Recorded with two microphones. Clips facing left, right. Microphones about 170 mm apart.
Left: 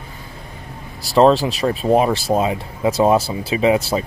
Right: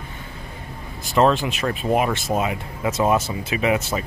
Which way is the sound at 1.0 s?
35° left (ahead or behind).